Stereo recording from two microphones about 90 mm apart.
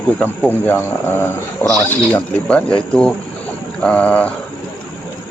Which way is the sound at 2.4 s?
10° left (ahead or behind).